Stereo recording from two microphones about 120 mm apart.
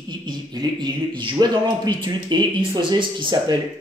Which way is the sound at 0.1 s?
35° right (ahead or behind).